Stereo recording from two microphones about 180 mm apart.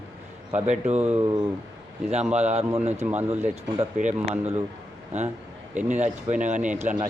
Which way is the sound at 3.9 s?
45° right (ahead or behind).